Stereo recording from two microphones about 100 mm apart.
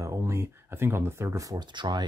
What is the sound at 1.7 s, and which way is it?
Speech, 50° right (ahead or behind).